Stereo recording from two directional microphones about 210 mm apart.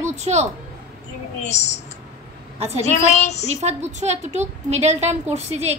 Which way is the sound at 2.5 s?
30° right (ahead or behind).